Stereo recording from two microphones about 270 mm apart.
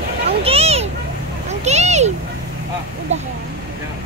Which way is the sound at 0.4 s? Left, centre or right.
Right.